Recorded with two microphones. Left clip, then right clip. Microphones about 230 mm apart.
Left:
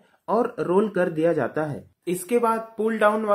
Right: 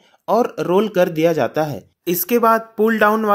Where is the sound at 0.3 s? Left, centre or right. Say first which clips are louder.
Right 6 dB; right.